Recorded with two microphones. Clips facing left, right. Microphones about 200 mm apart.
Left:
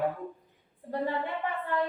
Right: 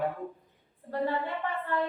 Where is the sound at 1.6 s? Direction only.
15° left (ahead or behind).